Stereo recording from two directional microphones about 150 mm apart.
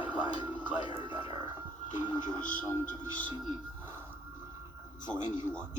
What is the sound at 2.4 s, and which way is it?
Speech, 60° left (ahead or behind).